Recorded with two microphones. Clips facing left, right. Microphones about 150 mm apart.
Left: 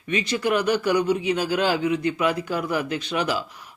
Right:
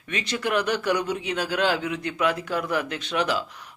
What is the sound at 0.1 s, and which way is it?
Speech, centre (ahead or behind).